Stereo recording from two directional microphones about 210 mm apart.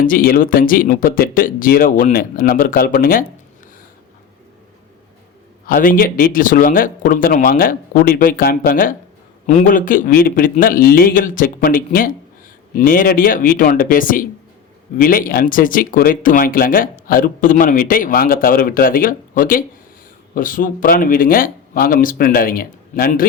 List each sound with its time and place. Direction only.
0.0 s speech: 45° left (ahead or behind)
5.6 s speech: 40° left (ahead or behind)